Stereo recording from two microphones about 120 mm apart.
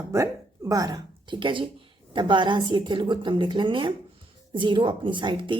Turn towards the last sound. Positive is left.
turn(degrees=-40)  # may be behind; listen again after turning